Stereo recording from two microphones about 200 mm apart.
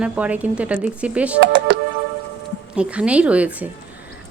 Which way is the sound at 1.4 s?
60° right (ahead or behind).